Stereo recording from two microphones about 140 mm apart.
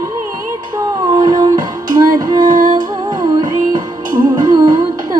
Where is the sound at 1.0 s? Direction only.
30° right (ahead or behind).